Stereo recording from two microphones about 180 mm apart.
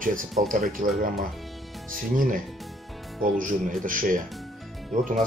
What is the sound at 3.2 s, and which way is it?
Speech, 50° right (ahead or behind).